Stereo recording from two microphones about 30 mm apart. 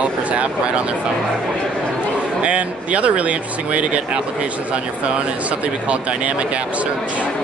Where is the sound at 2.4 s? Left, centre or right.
Right.